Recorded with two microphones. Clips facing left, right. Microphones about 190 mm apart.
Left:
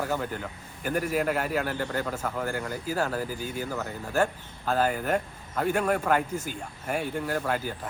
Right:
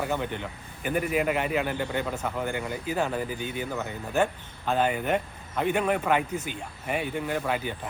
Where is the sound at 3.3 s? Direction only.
40° left (ahead or behind).